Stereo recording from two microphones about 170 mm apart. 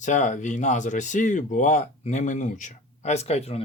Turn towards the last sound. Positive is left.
turn(degrees=40)  # may be behind; listen again after turning